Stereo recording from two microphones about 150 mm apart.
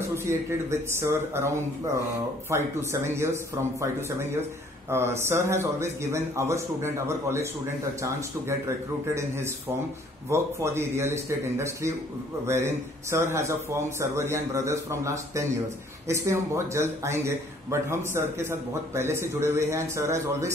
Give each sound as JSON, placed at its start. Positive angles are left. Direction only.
{"t": 0.1, "sound": "a man's voice", "side_deg": -20}
{"t": 2.5, "sound": "a man's voice", "side_deg": -15}
{"t": 4.8, "sound": "a man's voice", "side_deg": -15}